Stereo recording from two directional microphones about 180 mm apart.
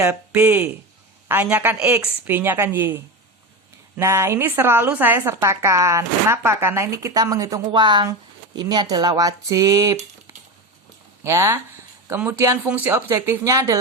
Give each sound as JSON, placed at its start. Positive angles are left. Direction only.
{"t": 0.0, "sound": "a woman's voice", "side_deg": -10}
{"t": 11.2, "sound": "a woman's voice", "side_deg": -15}